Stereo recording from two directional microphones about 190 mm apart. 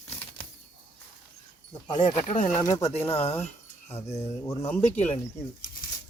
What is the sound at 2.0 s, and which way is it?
Speech, 40° left (ahead or behind).